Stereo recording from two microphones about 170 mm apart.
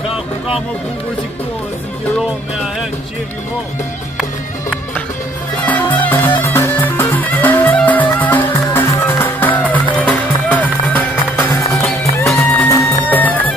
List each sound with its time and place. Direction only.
5.7 s music: 10° left (ahead or behind)